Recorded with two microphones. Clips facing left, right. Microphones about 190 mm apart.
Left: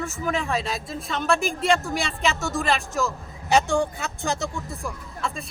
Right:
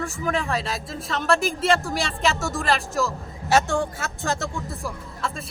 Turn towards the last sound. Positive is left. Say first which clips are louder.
# right 1 dB
turn(degrees=0)  # may be behind; listen again after turning